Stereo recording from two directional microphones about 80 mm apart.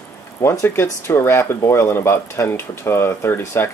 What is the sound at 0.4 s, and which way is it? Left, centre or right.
Speech, left.